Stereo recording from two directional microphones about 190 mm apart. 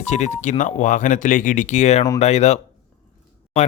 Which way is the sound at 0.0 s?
40° left (ahead or behind).